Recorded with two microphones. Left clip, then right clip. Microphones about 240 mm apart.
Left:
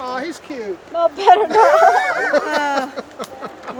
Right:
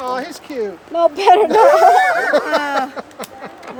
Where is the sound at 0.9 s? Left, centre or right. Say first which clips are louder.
Right 1 dB; right.